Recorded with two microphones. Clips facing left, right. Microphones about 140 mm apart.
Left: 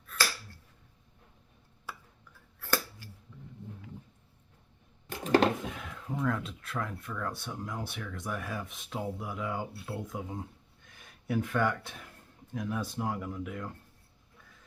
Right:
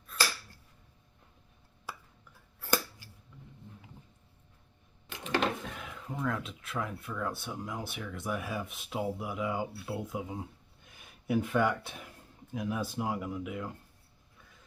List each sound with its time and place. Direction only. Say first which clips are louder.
2.6 s scissors: right 1 dB; 15° right (ahead or behind)
5.0 s a sound: left 6 dB; 40° left (ahead or behind)
5.7 s speech: left 2 dB; centre (ahead or behind)